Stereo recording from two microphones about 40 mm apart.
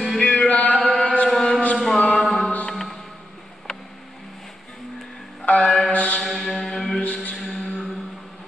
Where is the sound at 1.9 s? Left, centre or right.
Centre.